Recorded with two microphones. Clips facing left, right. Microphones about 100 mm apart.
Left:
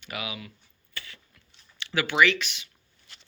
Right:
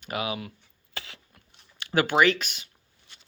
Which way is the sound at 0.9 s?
90° right.